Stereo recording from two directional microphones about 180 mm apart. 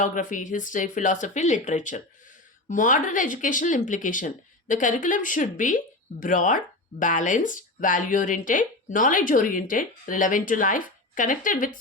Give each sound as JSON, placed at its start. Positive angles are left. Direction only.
{"t": 0.0, "sound": "speech", "side_deg": 45}